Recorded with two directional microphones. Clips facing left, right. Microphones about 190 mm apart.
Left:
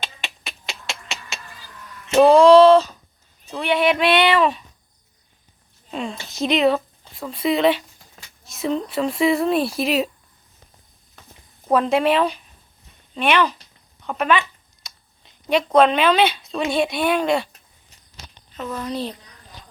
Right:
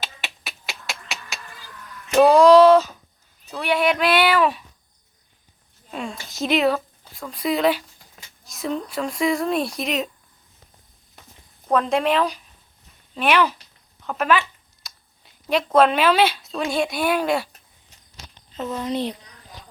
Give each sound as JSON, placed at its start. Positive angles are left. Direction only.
{"t": 0.0, "sound": "finger snapping", "side_deg": -5}
{"t": 2.1, "sound": "speech", "side_deg": 0}
{"t": 5.9, "sound": "speech", "side_deg": 0}
{"t": 11.7, "sound": "speech", "side_deg": 5}
{"t": 14.8, "sound": "a sound", "side_deg": 0}
{"t": 16.7, "sound": "speech", "side_deg": 0}
{"t": 18.5, "sound": "speech", "side_deg": -20}